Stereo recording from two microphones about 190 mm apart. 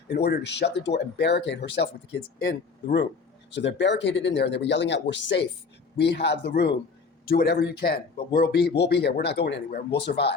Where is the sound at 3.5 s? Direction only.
70° left (ahead or behind).